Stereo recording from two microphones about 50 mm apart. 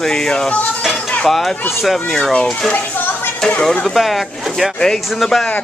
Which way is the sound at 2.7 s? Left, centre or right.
Left.